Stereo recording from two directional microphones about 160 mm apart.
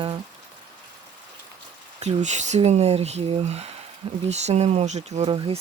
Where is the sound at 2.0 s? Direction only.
45° right (ahead or behind).